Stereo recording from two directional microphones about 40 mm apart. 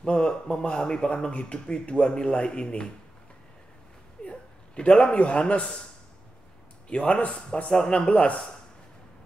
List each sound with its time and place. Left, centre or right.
0.0 s speech: left
4.2 s a sound: left
6.9 s speech: left
7.7 s speech: centre